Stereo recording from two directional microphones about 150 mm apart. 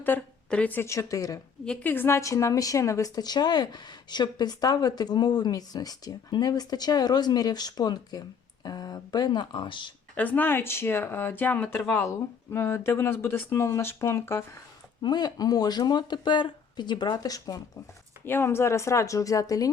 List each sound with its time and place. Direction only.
0.0 s speech: 10° left (ahead or behind)
1.6 s a woman's voice: 10° left (ahead or behind); by 9.9 s 35° left (ahead or behind)
10.2 s speech: 10° left (ahead or behind)
15.0 s a woman's voice: 25° left (ahead or behind)